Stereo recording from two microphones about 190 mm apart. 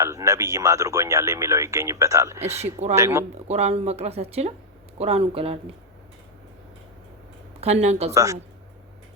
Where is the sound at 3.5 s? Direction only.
35° right (ahead or behind).